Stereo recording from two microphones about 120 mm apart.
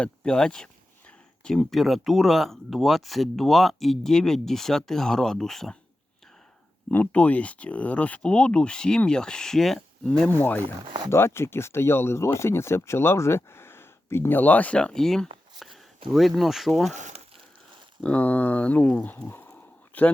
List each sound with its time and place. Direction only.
0.0 s speech: 10° left (ahead or behind)
6.9 s speech: 10° left (ahead or behind)
10.8 s speech: 40° right (ahead or behind)
11.1 s speech: 20° left (ahead or behind); by 15.3 s 5° left (ahead or behind)
15.5 s a sound: centre (ahead or behind)
16.1 s speech: centre (ahead or behind)
16.9 s a sound: 75° right (ahead or behind)
18.0 s speech: 10° left (ahead or behind)